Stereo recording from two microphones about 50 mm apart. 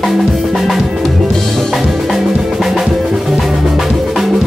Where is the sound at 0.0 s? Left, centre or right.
Centre.